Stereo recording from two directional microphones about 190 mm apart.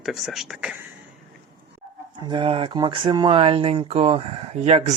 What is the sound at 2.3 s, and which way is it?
Speech, 25° right (ahead or behind).